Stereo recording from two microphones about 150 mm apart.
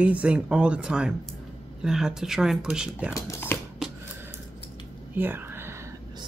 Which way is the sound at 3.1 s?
20° left (ahead or behind).